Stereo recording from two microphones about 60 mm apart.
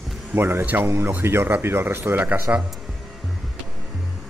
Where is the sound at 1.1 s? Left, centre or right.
Right.